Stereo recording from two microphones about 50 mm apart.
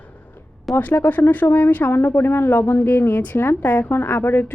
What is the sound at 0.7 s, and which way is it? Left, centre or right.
Speech, centre.